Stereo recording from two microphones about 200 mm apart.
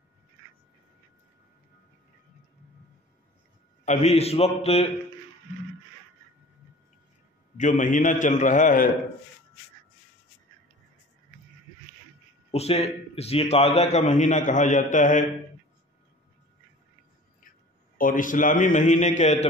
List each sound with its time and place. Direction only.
3.8 s a man's voice: 35° left (ahead or behind)
7.5 s a man's voice: 40° left (ahead or behind)
12.4 s a man's voice: 30° left (ahead or behind)
17.9 s a man's voice: 45° left (ahead or behind)